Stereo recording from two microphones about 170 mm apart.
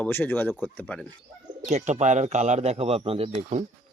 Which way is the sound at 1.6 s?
40° right (ahead or behind).